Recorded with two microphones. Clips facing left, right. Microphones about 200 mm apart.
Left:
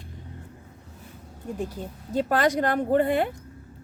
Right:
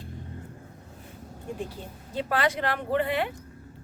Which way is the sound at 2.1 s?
45° left (ahead or behind).